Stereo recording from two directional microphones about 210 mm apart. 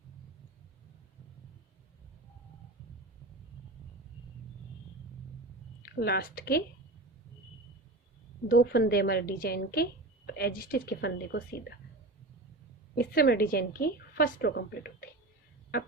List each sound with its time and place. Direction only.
5.8 s a woman's voice: 50° left (ahead or behind)
8.4 s a woman's voice: 45° left (ahead or behind)
13.0 s a woman's voice: 45° left (ahead or behind)